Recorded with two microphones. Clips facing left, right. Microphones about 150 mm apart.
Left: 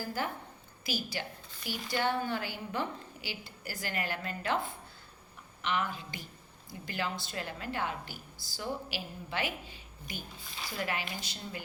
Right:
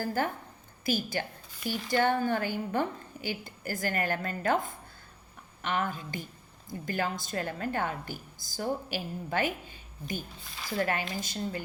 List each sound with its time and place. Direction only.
0.0 s a woman's voice: 50° right (ahead or behind)